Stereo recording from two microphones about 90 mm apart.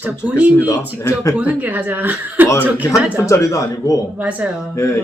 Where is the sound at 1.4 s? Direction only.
20° right (ahead or behind).